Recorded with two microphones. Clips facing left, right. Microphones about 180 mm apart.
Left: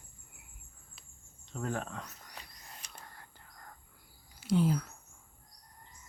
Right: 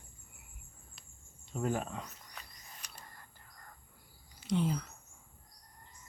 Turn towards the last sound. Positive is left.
turn(degrees=5)  # may be behind; listen again after turning